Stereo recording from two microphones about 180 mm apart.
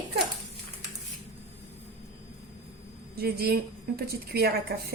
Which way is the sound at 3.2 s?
60° right (ahead or behind).